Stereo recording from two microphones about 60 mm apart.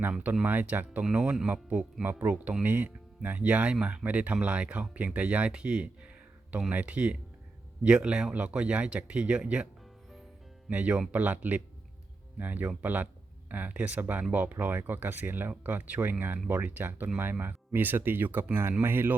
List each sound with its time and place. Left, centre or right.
0.4 s speech: right
10.7 s speech: right